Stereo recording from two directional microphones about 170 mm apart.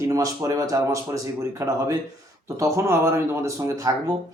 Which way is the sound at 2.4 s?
20° right (ahead or behind).